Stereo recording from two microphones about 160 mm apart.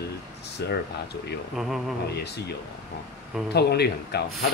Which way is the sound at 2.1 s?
90° left.